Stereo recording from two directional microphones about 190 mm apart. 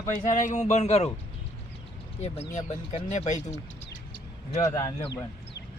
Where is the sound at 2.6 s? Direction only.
35° left (ahead or behind).